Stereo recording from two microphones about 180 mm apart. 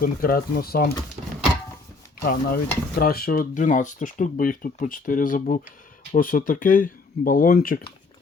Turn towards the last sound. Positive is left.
turn(degrees=55)  # may be behind; listen again after turning